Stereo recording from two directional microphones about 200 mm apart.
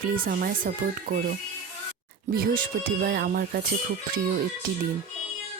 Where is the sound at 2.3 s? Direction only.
50° right (ahead or behind).